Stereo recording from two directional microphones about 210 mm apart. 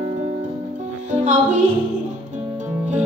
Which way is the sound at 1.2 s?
35° right (ahead or behind).